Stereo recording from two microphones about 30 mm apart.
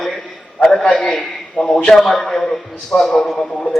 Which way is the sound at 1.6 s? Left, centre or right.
Left.